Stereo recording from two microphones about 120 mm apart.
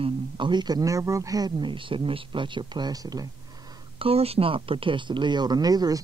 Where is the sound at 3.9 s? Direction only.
55° right (ahead or behind); by 6.0 s 30° right (ahead or behind).